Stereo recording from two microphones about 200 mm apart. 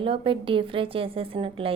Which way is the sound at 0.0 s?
25° right (ahead or behind).